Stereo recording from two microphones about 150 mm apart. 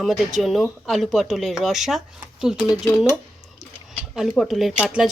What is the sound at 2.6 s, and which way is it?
Speech, 20° left (ahead or behind).